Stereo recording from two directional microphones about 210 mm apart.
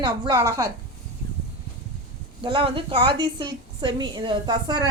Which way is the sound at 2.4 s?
25° right (ahead or behind).